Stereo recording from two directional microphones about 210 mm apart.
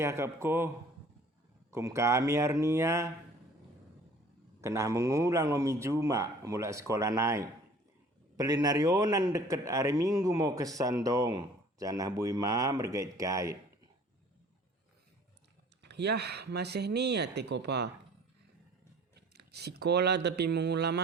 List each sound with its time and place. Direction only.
0.0 s a man's voice: 15° right (ahead or behind)
1.7 s a man's voice: 15° right (ahead or behind)
4.6 s a man's voice: 15° right (ahead or behind)
15.8 s speech: 55° right (ahead or behind)
19.3 s speech: 50° right (ahead or behind)